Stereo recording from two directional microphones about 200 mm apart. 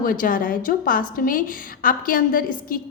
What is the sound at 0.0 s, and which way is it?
A woman's voice, 45° left (ahead or behind).